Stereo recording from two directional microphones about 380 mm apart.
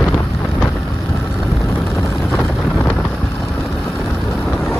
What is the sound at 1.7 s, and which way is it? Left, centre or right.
Vehicle, centre.